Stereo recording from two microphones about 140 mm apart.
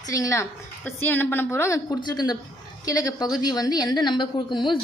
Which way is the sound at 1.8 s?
30° left (ahead or behind).